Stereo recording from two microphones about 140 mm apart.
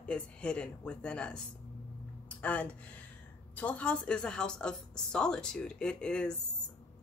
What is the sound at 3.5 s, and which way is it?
Speech, 10° left (ahead or behind).